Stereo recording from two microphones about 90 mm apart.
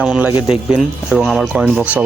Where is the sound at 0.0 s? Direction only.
10° right (ahead or behind).